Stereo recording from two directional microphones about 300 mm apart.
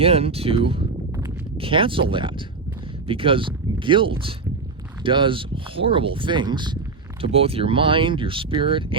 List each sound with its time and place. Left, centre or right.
0.0 s speech: centre